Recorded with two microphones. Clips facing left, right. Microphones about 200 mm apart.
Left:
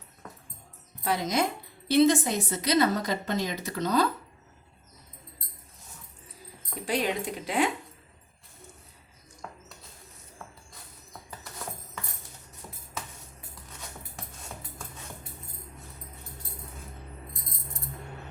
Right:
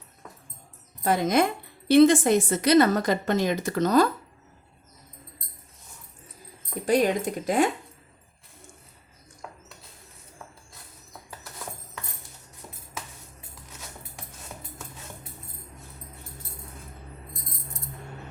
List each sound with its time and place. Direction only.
1.0 s a woman's voice: 50° right (ahead or behind)
6.8 s a woman's voice: 45° right (ahead or behind)